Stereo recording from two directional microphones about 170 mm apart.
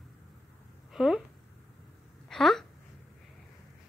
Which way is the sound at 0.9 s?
5° right (ahead or behind).